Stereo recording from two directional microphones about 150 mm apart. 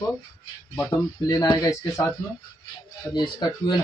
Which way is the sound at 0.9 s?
25° left (ahead or behind).